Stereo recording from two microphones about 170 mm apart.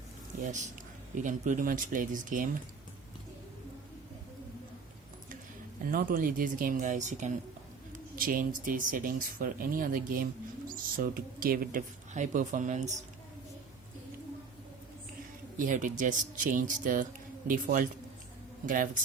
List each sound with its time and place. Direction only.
0.3 s speech: 45° right (ahead or behind)
5.9 s speech: 55° right (ahead or behind)
15.5 s speech: 50° right (ahead or behind)